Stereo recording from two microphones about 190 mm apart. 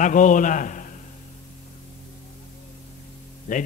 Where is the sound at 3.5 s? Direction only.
45° left (ahead or behind).